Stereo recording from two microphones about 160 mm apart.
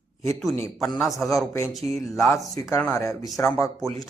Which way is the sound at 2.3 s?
20° left (ahead or behind).